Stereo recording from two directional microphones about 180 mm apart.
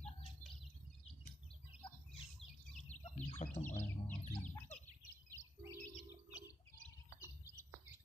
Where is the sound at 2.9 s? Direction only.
40° left (ahead or behind).